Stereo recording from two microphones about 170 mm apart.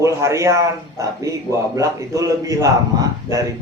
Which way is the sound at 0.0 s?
15° right (ahead or behind).